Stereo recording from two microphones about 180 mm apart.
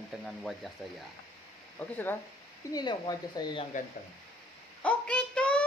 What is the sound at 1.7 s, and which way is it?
Speech, 10° left (ahead or behind).